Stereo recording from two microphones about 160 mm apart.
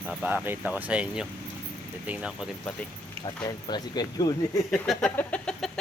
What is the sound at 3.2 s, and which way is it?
Speech, 25° left (ahead or behind).